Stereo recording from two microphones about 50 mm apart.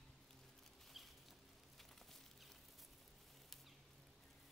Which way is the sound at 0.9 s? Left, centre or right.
Centre.